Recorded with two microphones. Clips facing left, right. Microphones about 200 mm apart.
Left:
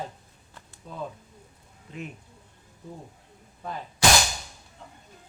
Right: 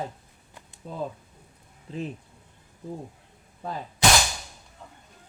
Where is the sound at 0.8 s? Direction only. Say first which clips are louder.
Right 3 dB; 30° right (ahead or behind).